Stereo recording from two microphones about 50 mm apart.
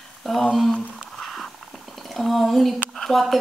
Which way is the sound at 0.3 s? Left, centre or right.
Centre.